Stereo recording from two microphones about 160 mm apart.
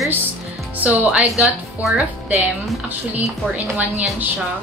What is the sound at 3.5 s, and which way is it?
Speech, 10° right (ahead or behind).